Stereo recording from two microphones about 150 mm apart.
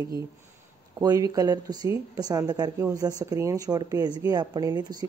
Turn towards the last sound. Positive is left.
turn(degrees=-25)  # may be behind; listen again after turning